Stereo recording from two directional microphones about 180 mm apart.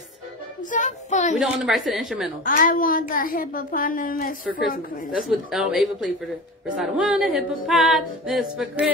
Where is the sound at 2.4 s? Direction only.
50° left (ahead or behind).